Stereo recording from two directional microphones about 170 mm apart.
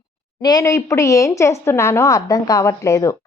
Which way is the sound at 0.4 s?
20° left (ahead or behind).